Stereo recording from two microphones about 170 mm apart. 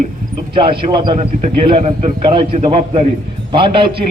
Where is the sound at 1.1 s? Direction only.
40° right (ahead or behind).